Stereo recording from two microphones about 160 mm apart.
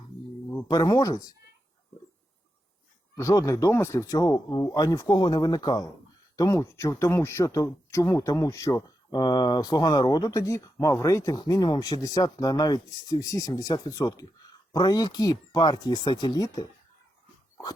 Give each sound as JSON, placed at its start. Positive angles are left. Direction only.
{"t": 0.7, "sound": "speech", "side_deg": 25}
{"t": 3.2, "sound": "speech", "side_deg": 20}